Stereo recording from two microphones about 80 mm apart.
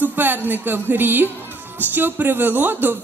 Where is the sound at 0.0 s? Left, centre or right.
Right.